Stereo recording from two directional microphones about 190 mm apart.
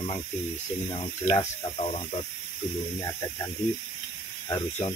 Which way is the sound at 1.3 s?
30° left (ahead or behind).